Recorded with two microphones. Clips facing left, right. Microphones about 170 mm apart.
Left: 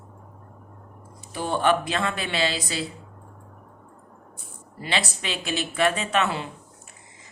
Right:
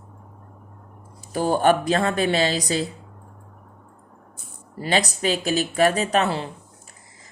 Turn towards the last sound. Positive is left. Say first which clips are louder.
# right 3 dB
turn(degrees=-35)  # may be behind; listen again after turning